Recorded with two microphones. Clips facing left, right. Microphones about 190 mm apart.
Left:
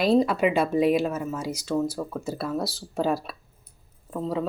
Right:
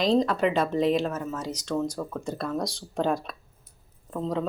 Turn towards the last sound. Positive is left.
turn(degrees=5)  # may be behind; listen again after turning